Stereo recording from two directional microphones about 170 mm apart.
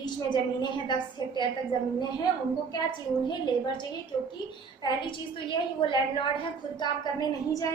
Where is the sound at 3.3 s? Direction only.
25° left (ahead or behind).